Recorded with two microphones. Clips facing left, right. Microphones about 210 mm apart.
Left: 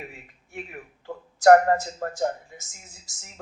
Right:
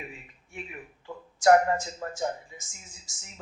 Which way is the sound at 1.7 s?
45° left (ahead or behind).